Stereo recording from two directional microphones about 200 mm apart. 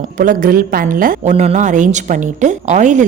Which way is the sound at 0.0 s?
40° right (ahead or behind).